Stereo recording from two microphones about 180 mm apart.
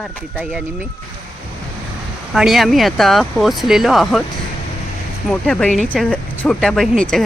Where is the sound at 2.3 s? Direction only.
Centre (ahead or behind).